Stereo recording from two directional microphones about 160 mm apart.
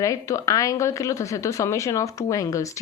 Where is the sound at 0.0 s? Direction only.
20° left (ahead or behind).